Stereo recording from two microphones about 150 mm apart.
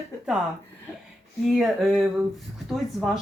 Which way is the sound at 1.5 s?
Centre (ahead or behind).